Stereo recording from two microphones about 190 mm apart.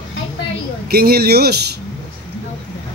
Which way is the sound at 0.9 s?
55° right (ahead or behind).